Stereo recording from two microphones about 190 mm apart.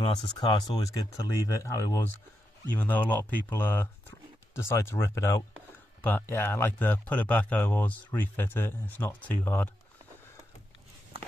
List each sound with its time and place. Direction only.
0.0 s speech: 25° left (ahead or behind)